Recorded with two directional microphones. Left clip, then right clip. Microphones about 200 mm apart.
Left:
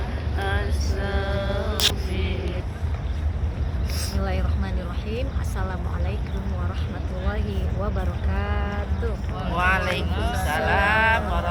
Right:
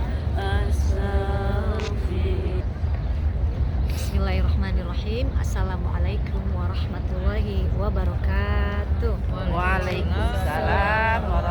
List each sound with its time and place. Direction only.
0.3 s vehicle: 55° right (ahead or behind)
4.2 s vehicle: 15° right (ahead or behind)
7.3 s a sound: 15° right (ahead or behind)
9.6 s vehicle: 60° left (ahead or behind)
10.1 s a sound: 40° right (ahead or behind)
10.5 s music: 60° left (ahead or behind)